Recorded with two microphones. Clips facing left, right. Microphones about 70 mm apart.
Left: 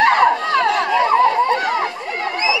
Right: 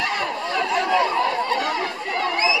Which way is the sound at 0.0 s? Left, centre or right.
Left.